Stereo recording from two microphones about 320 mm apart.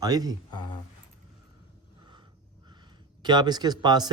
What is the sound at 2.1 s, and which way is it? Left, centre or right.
Speech, centre.